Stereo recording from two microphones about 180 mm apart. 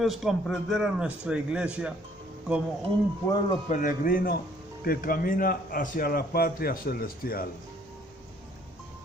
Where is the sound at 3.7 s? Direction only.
45° left (ahead or behind).